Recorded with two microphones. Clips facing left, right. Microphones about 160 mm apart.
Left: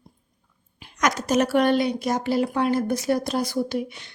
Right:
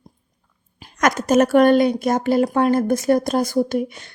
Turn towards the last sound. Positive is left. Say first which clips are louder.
# right 6 dB
turn(degrees=-45)  # may be behind; listen again after turning